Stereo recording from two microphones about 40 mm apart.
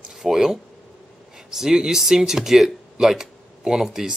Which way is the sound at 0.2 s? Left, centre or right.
Centre.